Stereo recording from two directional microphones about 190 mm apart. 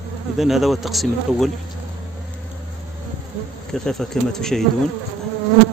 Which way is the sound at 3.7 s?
Centre (ahead or behind).